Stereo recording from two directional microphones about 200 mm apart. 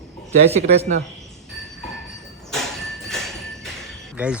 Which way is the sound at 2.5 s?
Centre (ahead or behind).